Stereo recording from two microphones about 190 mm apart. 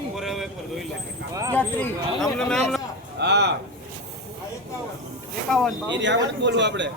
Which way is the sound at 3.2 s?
60° right (ahead or behind).